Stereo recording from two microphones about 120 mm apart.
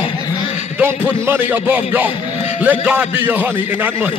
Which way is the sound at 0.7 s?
15° right (ahead or behind).